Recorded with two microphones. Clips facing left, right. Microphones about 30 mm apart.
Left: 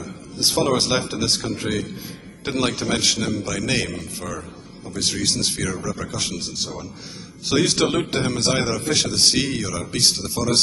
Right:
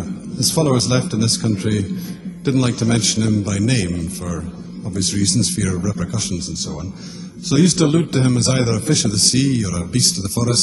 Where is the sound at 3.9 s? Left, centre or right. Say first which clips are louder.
Right 5 dB; left.